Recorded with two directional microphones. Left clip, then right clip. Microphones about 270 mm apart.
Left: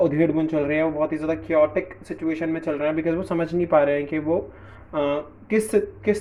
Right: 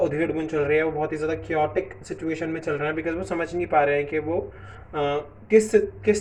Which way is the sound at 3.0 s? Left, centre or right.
Left.